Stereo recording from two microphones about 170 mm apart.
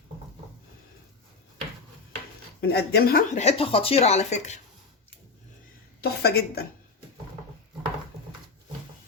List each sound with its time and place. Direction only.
2.6 s a woman's voice: 70° left (ahead or behind)
3.3 s a woman's voice: 35° left (ahead or behind)
6.0 s a woman's voice: 70° left (ahead or behind)